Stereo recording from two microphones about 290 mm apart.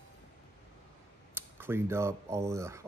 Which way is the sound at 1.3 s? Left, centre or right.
Centre.